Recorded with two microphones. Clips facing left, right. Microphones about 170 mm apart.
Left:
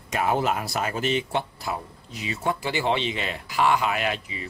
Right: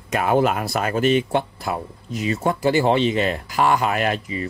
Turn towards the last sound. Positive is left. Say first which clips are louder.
# right 5 dB
turn(degrees=-45)  # may be behind; listen again after turning